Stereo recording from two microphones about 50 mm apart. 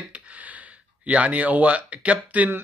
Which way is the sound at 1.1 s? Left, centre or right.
Right.